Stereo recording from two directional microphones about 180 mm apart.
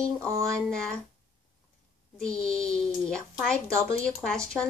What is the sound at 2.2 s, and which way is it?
Speech, 5° left (ahead or behind).